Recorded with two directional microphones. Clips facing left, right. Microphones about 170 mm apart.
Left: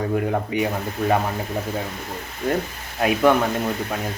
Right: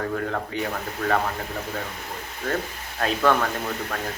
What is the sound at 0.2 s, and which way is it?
Speech, 15° left (ahead or behind).